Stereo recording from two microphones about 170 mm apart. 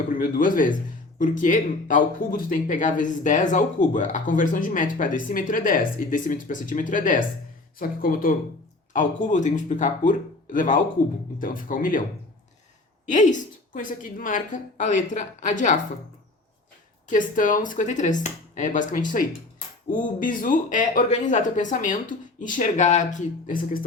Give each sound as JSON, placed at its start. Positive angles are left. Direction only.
{"t": 0.2, "sound": "speech", "side_deg": 55}
{"t": 13.1, "sound": "speech", "side_deg": 45}
{"t": 17.1, "sound": "speech", "side_deg": 50}